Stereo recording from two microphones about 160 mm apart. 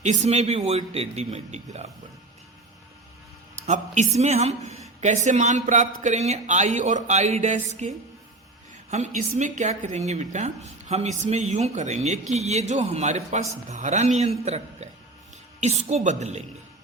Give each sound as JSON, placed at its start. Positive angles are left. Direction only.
{"t": 0.0, "sound": "a woman's voice", "side_deg": -45}
{"t": 3.5, "sound": "a woman's voice", "side_deg": -50}